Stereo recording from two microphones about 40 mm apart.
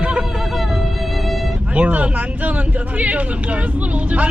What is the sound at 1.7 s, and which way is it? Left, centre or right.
Speech, right.